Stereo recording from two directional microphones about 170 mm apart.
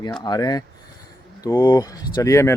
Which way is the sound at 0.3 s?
25° left (ahead or behind).